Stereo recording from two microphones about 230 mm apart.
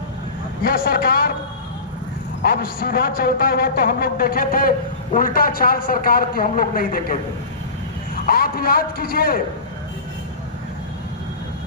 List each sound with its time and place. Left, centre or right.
0.6 s a man's voice: left
2.4 s a man's voice: left